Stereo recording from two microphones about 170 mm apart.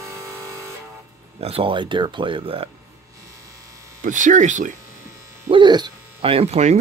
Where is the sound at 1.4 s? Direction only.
35° right (ahead or behind).